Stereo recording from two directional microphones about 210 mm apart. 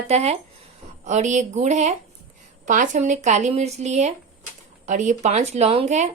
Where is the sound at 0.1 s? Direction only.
30° right (ahead or behind).